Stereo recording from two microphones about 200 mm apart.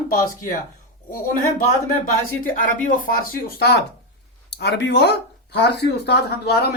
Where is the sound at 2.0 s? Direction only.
45° left (ahead or behind).